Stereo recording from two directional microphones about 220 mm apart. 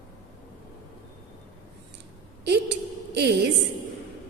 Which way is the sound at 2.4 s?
50° right (ahead or behind).